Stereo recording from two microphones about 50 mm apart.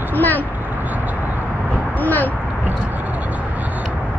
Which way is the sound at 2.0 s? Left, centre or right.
Left.